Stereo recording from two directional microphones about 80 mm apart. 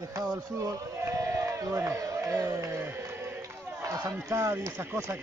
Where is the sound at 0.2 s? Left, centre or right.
Right.